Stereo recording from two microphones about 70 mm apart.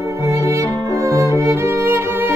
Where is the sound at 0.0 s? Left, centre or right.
Right.